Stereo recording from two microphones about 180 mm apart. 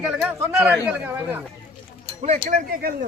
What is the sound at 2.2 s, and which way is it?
Speech, 40° right (ahead or behind).